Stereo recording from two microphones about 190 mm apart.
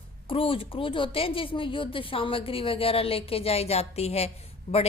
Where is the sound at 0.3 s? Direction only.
30° left (ahead or behind).